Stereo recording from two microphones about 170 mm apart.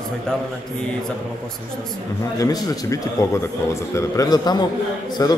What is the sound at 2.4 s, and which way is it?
A man's voice, 20° left (ahead or behind).